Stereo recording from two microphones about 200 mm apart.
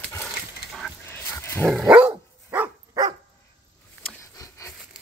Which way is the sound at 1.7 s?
Centre (ahead or behind).